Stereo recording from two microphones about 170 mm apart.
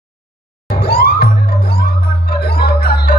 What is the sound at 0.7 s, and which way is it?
Music, 65° left (ahead or behind).